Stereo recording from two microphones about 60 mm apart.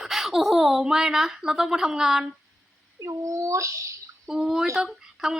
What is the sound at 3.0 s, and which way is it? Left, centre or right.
Speech, right.